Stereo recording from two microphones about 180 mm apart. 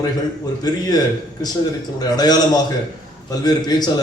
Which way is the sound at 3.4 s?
20° left (ahead or behind).